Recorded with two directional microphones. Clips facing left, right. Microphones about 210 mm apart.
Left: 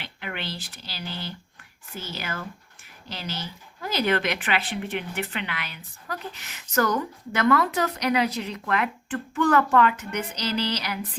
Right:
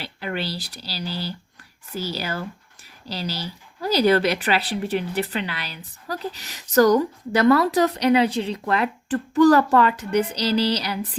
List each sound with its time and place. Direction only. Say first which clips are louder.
0.0 s speech: right 6 dB; 35° right (ahead or behind)